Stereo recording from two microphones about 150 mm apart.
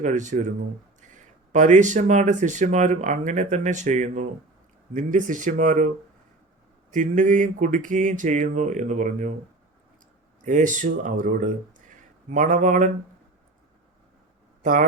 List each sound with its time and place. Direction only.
0.0 s speech: 55° right (ahead or behind)
6.9 s speech: 60° right (ahead or behind)
10.4 s speech: 60° right (ahead or behind)
14.6 s a man's voice: 60° right (ahead or behind)